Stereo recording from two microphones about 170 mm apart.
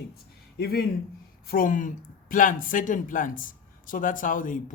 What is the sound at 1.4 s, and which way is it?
A woman's voice, 55° left (ahead or behind).